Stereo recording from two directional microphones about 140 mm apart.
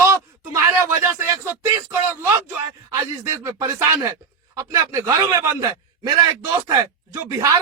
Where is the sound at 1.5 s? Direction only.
15° right (ahead or behind).